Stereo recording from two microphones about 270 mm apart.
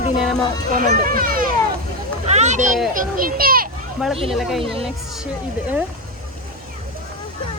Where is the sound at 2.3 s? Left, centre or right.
Right.